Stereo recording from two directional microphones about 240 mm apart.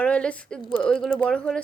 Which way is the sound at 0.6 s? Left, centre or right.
Left.